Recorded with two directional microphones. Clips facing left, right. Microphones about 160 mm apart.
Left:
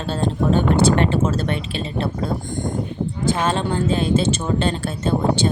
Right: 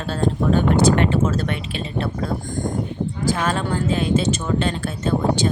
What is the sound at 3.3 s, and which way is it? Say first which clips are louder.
Speech: left 2 dB; 25° left (ahead or behind).